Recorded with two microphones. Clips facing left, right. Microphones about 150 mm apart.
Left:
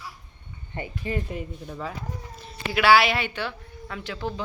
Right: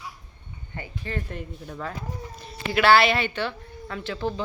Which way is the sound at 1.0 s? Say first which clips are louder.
Left 3 dB; 10° left (ahead or behind).